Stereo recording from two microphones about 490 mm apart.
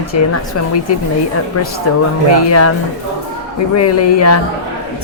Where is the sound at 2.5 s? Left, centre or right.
Left.